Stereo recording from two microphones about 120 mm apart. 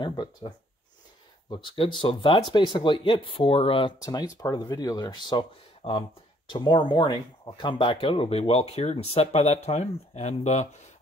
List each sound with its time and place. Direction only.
0.0 s speech: 40° left (ahead or behind)
1.5 s speech: 40° left (ahead or behind)
4.0 s speech: 35° left (ahead or behind); by 10.7 s 70° left (ahead or behind)